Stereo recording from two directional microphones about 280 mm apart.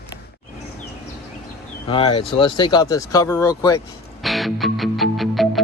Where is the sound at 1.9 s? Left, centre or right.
Centre.